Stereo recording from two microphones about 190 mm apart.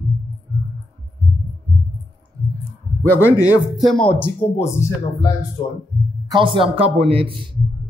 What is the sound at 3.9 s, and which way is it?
Speech, 5° left (ahead or behind).